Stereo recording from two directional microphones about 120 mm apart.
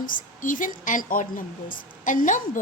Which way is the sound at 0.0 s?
90° left.